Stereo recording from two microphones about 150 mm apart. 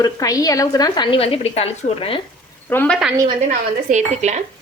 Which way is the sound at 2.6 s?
10° left (ahead or behind).